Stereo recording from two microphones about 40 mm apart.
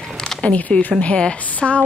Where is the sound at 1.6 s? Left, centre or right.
Centre.